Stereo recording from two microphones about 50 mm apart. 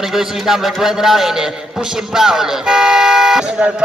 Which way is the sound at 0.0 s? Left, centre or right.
Centre.